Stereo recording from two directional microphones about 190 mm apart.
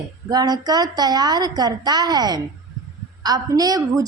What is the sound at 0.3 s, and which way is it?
A woman's voice, 20° right (ahead or behind).